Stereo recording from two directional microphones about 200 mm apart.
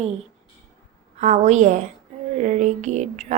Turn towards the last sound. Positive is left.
turn(degrees=-35)  # may be behind; listen again after turning